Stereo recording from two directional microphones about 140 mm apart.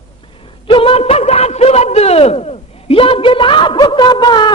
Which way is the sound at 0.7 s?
40° left (ahead or behind).